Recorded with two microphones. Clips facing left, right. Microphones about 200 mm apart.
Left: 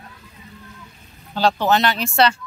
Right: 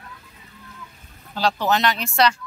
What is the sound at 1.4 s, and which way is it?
Speech, 30° left (ahead or behind).